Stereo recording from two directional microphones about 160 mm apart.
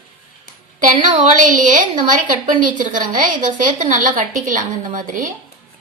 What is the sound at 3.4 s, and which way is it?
A woman's voice, 50° right (ahead or behind).